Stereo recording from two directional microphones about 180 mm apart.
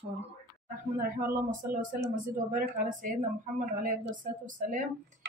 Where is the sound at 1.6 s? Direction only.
45° right (ahead or behind).